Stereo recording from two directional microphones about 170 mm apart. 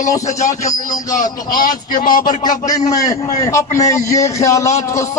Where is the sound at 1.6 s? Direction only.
55° left (ahead or behind).